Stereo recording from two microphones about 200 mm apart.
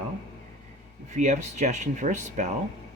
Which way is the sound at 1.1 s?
35° right (ahead or behind).